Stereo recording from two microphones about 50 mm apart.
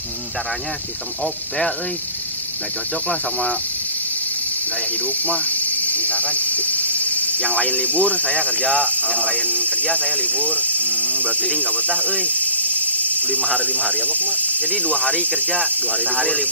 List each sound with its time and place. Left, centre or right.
1.2 s speech: centre
5.0 s speech: left